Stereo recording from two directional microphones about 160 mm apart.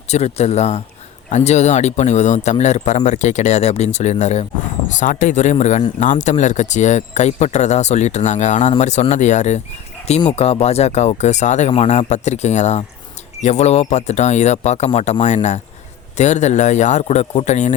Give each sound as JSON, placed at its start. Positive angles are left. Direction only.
{"t": 0.1, "sound": "speech", "side_deg": 40}
{"t": 10.2, "sound": "speech", "side_deg": 35}